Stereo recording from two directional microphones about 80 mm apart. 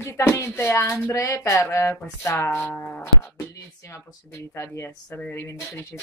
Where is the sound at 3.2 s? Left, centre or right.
Left.